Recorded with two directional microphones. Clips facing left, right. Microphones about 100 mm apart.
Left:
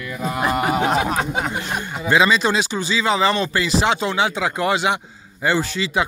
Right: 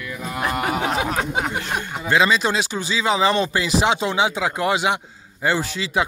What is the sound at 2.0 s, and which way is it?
Speech, 5° left (ahead or behind).